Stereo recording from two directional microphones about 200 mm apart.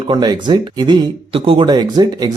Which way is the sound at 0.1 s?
20° right (ahead or behind).